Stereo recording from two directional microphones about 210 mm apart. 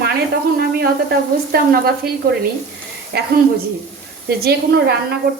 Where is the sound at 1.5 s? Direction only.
45° right (ahead or behind).